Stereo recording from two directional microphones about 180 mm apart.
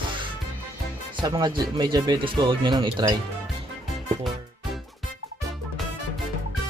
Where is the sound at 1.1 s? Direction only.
25° right (ahead or behind).